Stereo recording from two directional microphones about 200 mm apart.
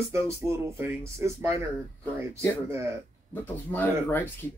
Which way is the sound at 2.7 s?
15° right (ahead or behind).